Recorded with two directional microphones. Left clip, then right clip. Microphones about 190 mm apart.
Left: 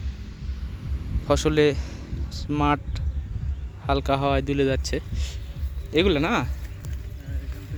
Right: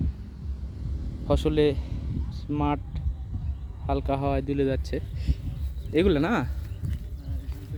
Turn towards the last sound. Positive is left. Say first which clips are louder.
# left 2 dB
turn(degrees=-25)  # may be behind; listen again after turning